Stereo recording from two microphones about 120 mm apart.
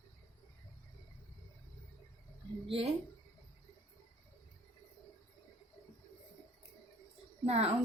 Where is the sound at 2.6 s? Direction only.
50° right (ahead or behind).